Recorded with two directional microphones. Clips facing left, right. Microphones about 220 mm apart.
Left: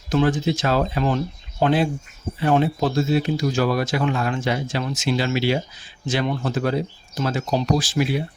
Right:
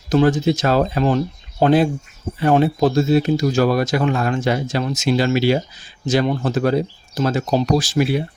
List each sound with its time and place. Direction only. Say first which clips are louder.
0.1 s speech: right 4 dB; 40° right (ahead or behind)